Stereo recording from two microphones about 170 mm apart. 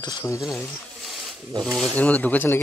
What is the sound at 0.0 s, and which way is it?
Speech, 20° left (ahead or behind).